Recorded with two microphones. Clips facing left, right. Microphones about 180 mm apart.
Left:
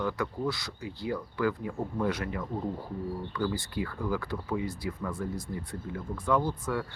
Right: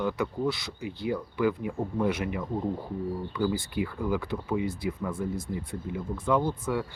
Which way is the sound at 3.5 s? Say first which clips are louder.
Right 3 dB; 20° right (ahead or behind).